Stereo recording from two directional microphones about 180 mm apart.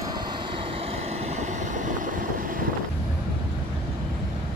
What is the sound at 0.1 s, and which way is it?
Vehicle, 25° right (ahead or behind).